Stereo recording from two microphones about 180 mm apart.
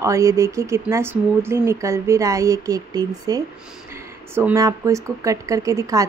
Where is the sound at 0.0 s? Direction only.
15° right (ahead or behind).